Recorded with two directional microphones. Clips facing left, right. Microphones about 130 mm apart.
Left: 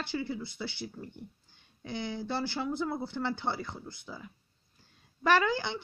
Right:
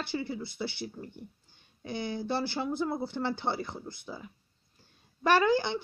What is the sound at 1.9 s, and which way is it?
Speech, 15° right (ahead or behind).